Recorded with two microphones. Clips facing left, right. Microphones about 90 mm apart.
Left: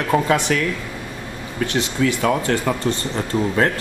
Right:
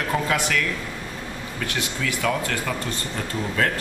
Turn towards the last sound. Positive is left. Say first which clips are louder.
# left 5 dB
turn(degrees=25)  # may be behind; listen again after turning